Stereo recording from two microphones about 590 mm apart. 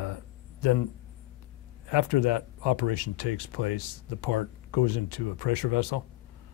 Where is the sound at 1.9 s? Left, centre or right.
Left.